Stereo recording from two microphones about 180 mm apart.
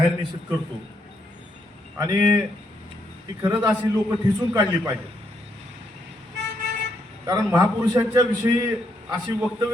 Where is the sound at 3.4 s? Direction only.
10° right (ahead or behind).